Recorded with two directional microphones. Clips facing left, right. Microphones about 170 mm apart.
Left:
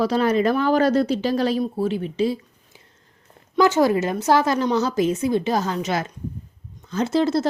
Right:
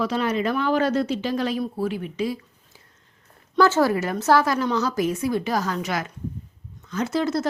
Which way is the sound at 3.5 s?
15° left (ahead or behind).